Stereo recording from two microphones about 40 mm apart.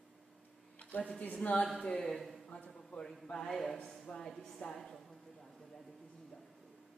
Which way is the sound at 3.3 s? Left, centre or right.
Centre.